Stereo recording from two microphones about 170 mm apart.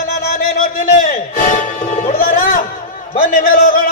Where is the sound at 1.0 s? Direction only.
50° left (ahead or behind).